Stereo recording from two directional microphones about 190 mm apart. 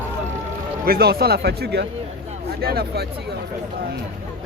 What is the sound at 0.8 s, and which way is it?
Speech, 55° right (ahead or behind).